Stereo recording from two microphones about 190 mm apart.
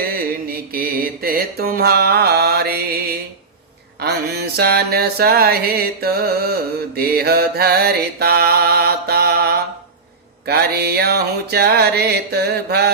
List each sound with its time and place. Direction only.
0.0 s mantra: 50° right (ahead or behind)
4.0 s mantra: 55° right (ahead or behind)